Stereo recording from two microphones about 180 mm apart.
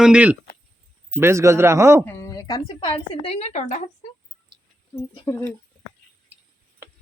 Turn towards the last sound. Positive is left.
turn(degrees=15)  # may be behind; listen again after turning